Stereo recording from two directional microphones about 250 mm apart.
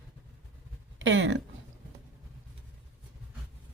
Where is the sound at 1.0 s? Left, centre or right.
Right.